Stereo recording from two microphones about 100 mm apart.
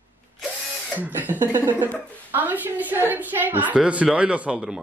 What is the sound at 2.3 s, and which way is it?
Speech, 20° right (ahead or behind).